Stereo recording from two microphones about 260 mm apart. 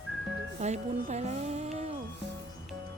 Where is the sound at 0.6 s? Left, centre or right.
Right.